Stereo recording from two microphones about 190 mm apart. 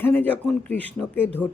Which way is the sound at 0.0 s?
10° left (ahead or behind).